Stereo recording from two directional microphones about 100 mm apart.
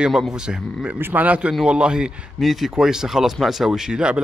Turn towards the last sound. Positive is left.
turn(degrees=-10)  # may be behind; listen again after turning